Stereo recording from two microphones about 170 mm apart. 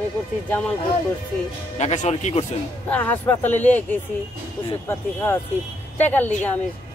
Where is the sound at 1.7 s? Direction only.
45° left (ahead or behind).